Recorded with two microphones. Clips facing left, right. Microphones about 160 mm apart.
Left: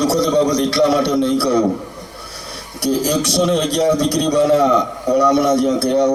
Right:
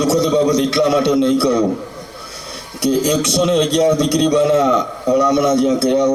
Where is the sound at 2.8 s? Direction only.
20° right (ahead or behind).